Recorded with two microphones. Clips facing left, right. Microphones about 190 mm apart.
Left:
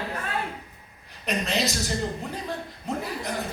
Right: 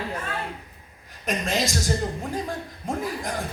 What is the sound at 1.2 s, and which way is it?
Speech, 45° right (ahead or behind).